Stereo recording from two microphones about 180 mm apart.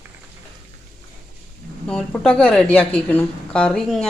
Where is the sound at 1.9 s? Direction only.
5° left (ahead or behind).